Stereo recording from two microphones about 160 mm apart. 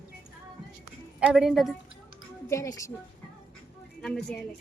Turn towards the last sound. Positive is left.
turn(degrees=5)  # may be behind; listen again after turning